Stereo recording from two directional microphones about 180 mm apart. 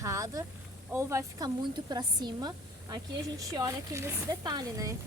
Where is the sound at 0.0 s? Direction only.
15° right (ahead or behind).